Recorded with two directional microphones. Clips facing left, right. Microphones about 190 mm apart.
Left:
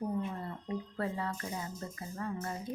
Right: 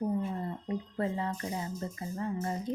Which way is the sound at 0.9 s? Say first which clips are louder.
Right 4 dB; 20° right (ahead or behind).